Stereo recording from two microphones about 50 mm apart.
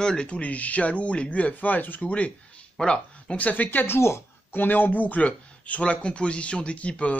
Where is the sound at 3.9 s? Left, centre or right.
Left.